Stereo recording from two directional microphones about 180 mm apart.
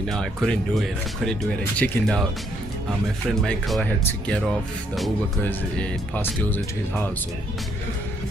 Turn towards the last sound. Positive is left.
turn(degrees=10)  # may be behind; listen again after turning